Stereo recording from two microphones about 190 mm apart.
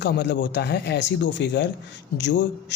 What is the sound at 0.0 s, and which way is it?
A man's voice, 65° left (ahead or behind).